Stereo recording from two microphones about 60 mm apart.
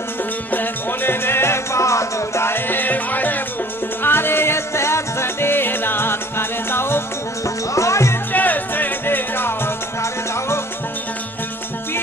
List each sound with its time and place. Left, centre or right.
0.5 s music: left
7.4 s music: left
8.3 s music: left